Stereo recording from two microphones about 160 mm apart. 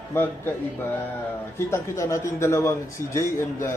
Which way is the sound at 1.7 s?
20° left (ahead or behind).